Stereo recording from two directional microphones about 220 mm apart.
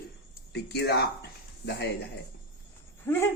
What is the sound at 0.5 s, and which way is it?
Speech, 50° left (ahead or behind).